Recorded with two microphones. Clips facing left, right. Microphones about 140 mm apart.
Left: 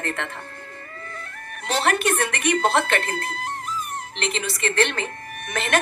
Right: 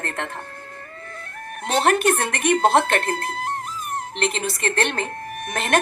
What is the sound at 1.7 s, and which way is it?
Speech, 50° right (ahead or behind).